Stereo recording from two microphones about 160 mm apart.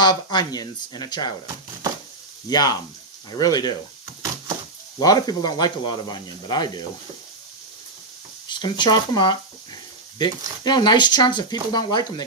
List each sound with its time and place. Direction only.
0.0 s speech: 25° left (ahead or behind)
2.5 s speech: 25° left (ahead or behind)
4.9 s speech: 25° left (ahead or behind)
8.4 s speech: 30° left (ahead or behind)